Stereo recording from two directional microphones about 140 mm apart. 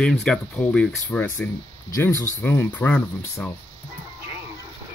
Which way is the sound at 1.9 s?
20° left (ahead or behind).